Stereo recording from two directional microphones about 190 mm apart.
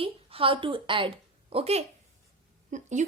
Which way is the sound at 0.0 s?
30° right (ahead or behind).